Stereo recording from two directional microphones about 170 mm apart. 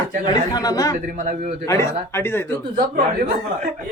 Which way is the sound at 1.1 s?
50° right (ahead or behind).